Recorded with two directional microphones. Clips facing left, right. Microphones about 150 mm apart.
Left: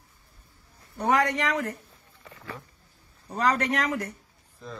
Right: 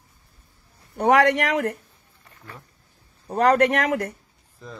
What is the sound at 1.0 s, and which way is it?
Speech, 80° right.